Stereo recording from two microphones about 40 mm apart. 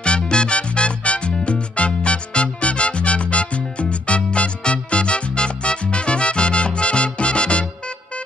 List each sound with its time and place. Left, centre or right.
0.0 s music: left